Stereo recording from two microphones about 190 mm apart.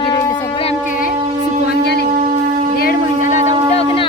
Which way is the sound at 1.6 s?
60° left (ahead or behind).